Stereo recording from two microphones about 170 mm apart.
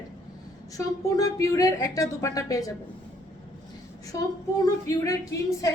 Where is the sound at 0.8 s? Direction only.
20° left (ahead or behind).